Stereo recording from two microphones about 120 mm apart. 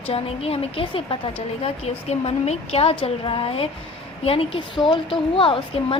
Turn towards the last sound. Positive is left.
turn(degrees=50)  # may be behind; listen again after turning